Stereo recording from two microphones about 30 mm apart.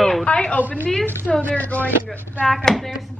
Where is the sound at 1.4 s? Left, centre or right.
Left.